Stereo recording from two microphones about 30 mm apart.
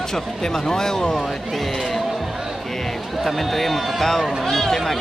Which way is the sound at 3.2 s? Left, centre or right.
Centre.